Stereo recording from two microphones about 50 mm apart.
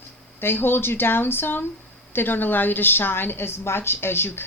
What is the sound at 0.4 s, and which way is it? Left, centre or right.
A woman's voice, left.